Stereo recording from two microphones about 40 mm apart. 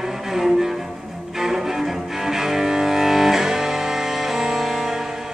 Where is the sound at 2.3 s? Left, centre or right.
Centre.